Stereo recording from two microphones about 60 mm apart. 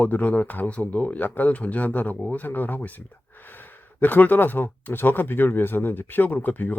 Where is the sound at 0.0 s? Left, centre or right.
Left.